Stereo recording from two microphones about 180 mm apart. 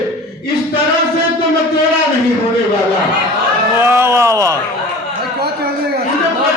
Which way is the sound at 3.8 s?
10° right (ahead or behind).